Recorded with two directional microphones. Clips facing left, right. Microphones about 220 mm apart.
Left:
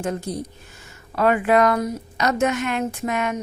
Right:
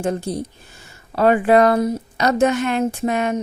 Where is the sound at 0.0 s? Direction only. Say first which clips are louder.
Right 4 dB; 30° right (ahead or behind).